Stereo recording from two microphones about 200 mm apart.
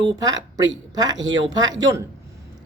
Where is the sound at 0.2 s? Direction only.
20° right (ahead or behind).